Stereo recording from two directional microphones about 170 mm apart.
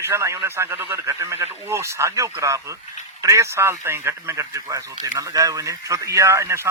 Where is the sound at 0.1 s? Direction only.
15° right (ahead or behind).